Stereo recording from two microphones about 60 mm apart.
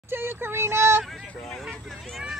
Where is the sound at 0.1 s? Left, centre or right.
Right.